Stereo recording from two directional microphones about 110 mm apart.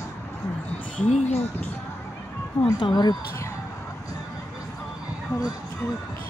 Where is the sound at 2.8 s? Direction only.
40° left (ahead or behind).